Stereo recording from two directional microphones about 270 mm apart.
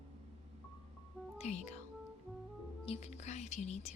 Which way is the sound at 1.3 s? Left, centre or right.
Left.